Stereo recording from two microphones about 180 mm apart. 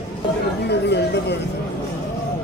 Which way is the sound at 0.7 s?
70° left (ahead or behind).